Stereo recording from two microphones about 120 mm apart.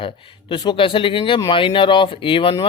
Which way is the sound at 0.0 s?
45° left (ahead or behind).